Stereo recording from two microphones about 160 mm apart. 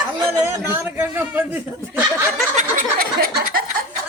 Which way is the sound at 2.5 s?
60° right (ahead or behind).